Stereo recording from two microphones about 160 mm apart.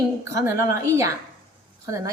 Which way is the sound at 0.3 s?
20° right (ahead or behind).